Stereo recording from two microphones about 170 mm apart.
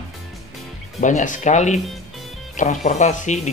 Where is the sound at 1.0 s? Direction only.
50° left (ahead or behind).